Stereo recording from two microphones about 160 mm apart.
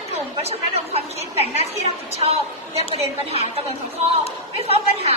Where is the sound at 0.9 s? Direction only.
40° right (ahead or behind).